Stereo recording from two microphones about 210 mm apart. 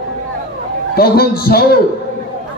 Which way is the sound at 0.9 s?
45° left (ahead or behind).